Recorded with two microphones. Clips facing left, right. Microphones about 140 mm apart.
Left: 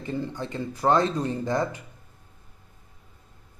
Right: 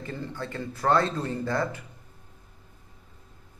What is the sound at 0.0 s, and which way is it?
Speech, 15° left (ahead or behind).